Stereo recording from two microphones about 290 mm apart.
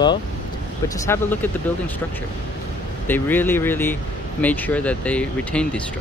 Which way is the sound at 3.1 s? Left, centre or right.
Centre.